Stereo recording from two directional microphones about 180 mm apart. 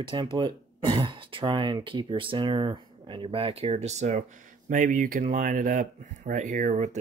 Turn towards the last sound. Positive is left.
turn(degrees=-40)  # may be behind; listen again after turning